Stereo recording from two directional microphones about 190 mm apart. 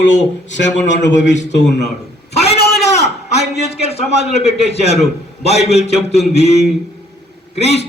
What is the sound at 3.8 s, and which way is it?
A man's voice, 35° left (ahead or behind).